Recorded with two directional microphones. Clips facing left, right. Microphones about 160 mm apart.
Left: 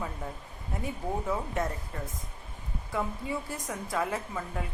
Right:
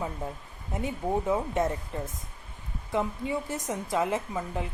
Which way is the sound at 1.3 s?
20° right (ahead or behind).